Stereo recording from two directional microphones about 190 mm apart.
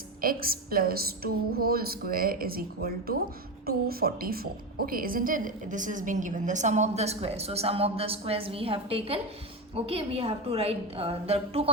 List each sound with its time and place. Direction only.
0.2 s a woman's voice: 50° right (ahead or behind); by 11.7 s 30° right (ahead or behind)